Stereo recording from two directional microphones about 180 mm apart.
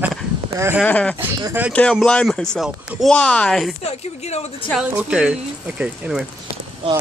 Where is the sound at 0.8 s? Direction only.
5° left (ahead or behind).